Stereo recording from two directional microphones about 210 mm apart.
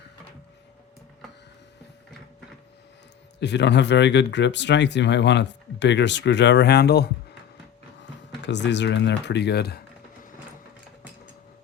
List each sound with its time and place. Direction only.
3.4 s speech: 55° left (ahead or behind)
8.4 s speech: 55° left (ahead or behind)